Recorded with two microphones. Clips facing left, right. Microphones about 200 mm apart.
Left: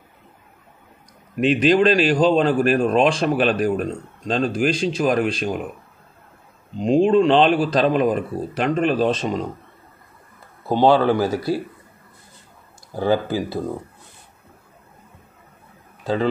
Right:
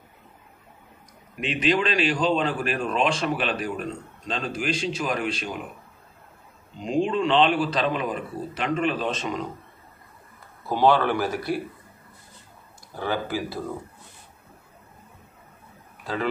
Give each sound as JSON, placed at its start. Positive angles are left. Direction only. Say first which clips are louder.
{"t": 1.4, "sound": "a man's voice", "louder": "left 8 dB", "side_deg": 40}
{"t": 6.8, "sound": "a man's voice", "louder": "left 8 dB", "side_deg": 40}
{"t": 10.7, "sound": "speech", "louder": "left 5 dB", "side_deg": 25}
{"t": 12.9, "sound": "a man's voice", "louder": "left 7 dB", "side_deg": 30}